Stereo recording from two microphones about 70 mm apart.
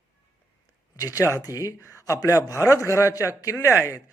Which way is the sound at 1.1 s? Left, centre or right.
Left.